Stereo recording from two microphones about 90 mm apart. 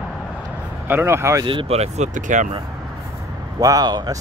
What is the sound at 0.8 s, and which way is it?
Speech, 25° right (ahead or behind).